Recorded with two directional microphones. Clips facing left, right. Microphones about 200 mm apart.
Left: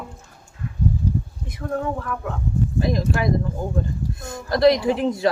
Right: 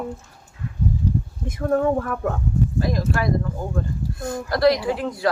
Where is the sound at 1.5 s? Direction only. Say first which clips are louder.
Right 6 dB; 45° right (ahead or behind).